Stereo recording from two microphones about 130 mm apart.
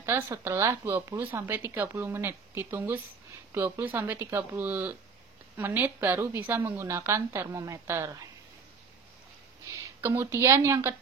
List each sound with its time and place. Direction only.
0.0 s a woman's voice: 20° right (ahead or behind)
9.7 s speech: 20° right (ahead or behind)